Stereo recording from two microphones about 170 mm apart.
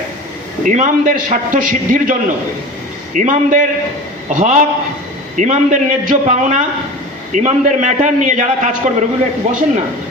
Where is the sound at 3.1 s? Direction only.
50° right (ahead or behind).